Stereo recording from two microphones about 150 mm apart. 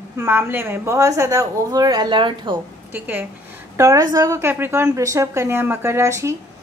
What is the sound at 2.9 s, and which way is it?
A woman's voice, 10° right (ahead or behind).